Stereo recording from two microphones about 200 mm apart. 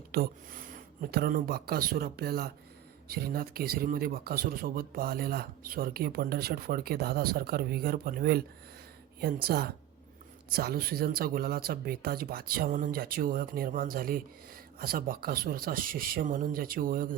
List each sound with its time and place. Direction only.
0.1 s speech: 45° right (ahead or behind)